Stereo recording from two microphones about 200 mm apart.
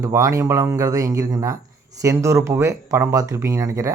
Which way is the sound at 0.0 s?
15° right (ahead or behind).